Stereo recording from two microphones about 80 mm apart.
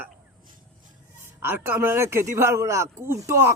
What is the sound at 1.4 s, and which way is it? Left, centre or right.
A man's voice, right.